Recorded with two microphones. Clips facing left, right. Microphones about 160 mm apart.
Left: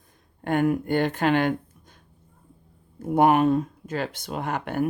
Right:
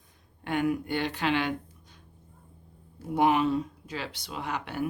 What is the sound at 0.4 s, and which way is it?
Speech, 50° left (ahead or behind).